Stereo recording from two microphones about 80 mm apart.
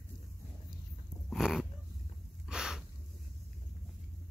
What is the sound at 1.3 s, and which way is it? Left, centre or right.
Dog, centre.